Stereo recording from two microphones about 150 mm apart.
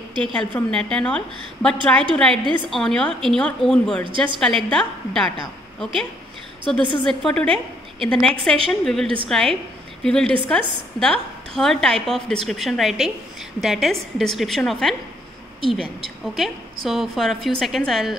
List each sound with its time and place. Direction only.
0.2 s a woman's voice: 5° left (ahead or behind)
9.0 s a woman's voice: 35° right (ahead or behind)
9.3 s a woman's voice: centre (ahead or behind)
16.3 s a woman's voice: centre (ahead or behind)